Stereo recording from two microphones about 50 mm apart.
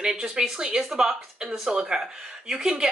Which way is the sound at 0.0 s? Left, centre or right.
Centre.